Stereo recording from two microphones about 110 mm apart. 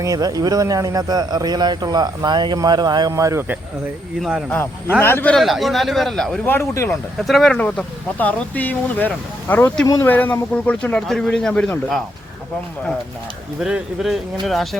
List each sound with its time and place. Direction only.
0.0 s speech: 35° right (ahead or behind)
4.2 s a man's voice: 5° right (ahead or behind)
4.9 s speech: 20° left (ahead or behind)
5.3 s a man's voice: centre (ahead or behind)
6.4 s speech: 20° left (ahead or behind)
7.2 s a man's voice: centre (ahead or behind)
7.6 s speech: 15° left (ahead or behind)
13.6 s a man's voice: 5° right (ahead or behind)